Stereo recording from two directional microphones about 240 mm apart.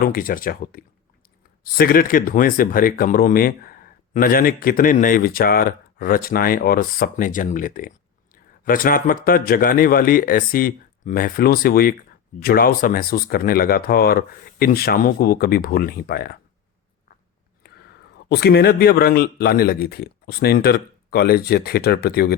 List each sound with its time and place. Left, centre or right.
0.0 s speech: left
18.3 s speech: left